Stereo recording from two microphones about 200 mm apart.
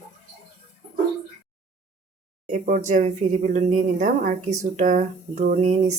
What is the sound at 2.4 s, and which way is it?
Speech, 40° right (ahead or behind).